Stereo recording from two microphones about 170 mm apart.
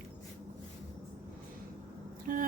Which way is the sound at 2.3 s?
55° right (ahead or behind).